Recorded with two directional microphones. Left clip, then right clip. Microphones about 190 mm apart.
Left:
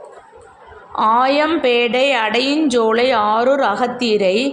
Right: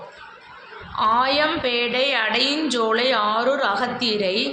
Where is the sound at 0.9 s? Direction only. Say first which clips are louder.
Left 5 dB; 45° left (ahead or behind).